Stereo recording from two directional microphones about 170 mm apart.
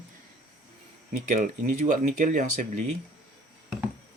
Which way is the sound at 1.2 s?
50° right (ahead or behind).